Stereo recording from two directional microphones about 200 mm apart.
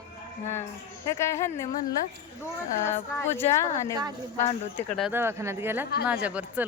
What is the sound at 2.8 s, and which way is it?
A woman's voice, 10° left (ahead or behind).